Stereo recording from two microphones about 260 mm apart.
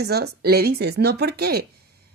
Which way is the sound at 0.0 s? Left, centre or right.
Right.